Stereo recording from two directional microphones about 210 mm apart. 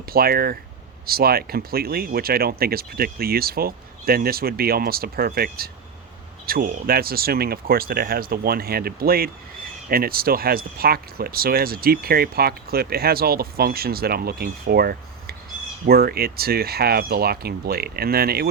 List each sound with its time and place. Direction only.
0.1 s speech: 45° right (ahead or behind)